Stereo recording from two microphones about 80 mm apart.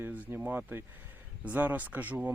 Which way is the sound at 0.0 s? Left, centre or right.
Right.